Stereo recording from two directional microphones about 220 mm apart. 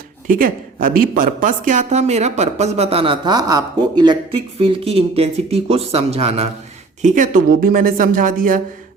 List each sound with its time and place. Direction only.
0.3 s speech: 40° right (ahead or behind)